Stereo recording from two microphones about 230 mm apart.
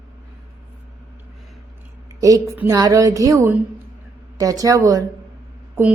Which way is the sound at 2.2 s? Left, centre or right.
Centre.